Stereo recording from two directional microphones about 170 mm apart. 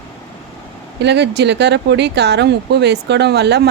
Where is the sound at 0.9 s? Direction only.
90° right.